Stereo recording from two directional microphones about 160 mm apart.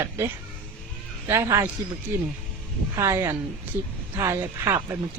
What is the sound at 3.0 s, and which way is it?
A woman's voice, 15° right (ahead or behind).